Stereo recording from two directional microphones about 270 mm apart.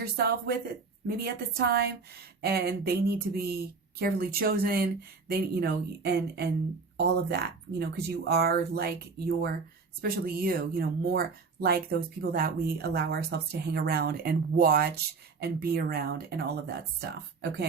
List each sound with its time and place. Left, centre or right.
0.0 s speech: right